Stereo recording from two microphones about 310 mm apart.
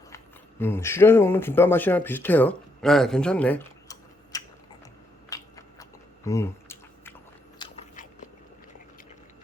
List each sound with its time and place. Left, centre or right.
0.6 s speech: centre
5.3 s chewing: centre
7.6 s biting: left